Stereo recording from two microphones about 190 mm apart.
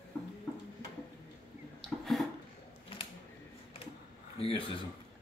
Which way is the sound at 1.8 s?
Centre (ahead or behind).